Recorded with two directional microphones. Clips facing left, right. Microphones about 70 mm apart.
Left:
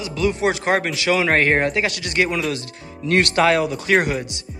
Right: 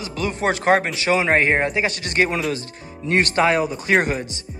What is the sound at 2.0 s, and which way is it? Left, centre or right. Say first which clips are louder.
Speech: even; right.